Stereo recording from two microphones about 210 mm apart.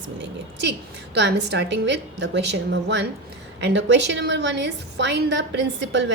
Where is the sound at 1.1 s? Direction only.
55° right (ahead or behind).